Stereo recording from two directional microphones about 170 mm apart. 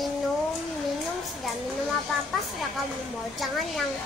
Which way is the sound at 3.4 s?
Centre (ahead or behind).